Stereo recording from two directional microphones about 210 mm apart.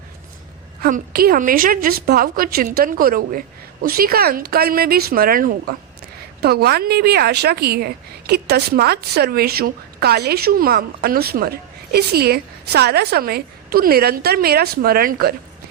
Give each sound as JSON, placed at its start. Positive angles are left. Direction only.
{"t": 0.8, "sound": "a woman's voice", "side_deg": -40}